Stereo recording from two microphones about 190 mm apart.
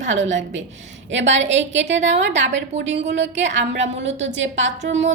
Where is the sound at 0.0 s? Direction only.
75° right (ahead or behind).